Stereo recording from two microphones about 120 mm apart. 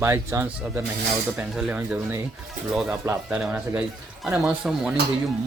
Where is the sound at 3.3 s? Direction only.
10° right (ahead or behind).